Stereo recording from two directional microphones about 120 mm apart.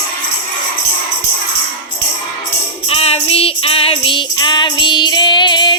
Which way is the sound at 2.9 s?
55° left (ahead or behind).